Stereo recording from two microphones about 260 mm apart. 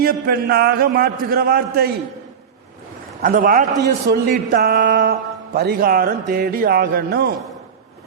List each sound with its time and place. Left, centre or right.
0.0 s a man's voice: right
3.2 s a man's voice: right